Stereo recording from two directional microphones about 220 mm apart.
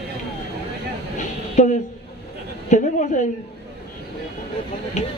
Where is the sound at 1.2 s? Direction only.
35° left (ahead or behind).